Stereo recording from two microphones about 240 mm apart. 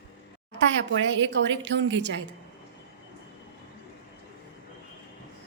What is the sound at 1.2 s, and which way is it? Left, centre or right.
A woman's voice, right.